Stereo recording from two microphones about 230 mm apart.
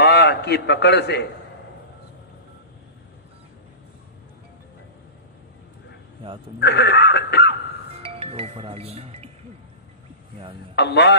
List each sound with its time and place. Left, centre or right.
0.0 s a man's voice: left
6.6 s a sound: left
8.0 s speech: right
10.8 s a man's voice: left